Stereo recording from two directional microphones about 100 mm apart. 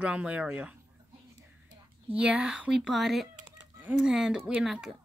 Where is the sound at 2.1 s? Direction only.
10° right (ahead or behind).